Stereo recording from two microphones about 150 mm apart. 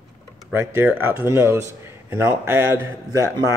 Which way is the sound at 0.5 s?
15° right (ahead or behind).